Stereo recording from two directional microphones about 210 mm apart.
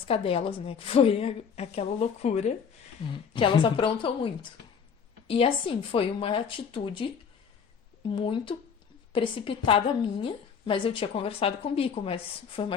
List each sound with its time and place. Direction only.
0.1 s a woman's voice: 25° left (ahead or behind)
5.3 s a woman's voice: 25° left (ahead or behind)
8.0 s a woman's voice: 25° left (ahead or behind)